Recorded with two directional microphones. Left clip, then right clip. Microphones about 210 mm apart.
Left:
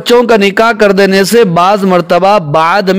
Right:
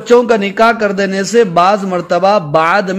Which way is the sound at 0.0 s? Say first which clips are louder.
Left 3 dB; 50° left (ahead or behind).